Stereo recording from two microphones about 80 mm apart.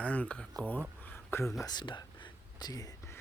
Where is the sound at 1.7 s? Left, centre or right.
Left.